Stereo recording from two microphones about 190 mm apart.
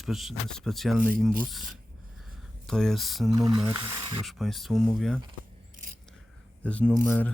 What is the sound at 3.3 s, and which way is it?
Speech, 20° right (ahead or behind).